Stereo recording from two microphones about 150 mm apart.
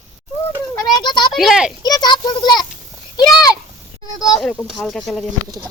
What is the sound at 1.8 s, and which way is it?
A child's voice, 25° left (ahead or behind).